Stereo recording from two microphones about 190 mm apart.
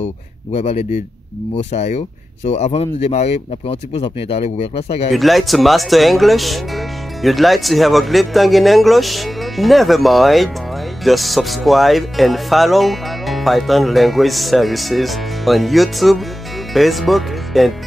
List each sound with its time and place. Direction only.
0.5 s speech: 30° left (ahead or behind)
5.1 s speech: centre (ahead or behind)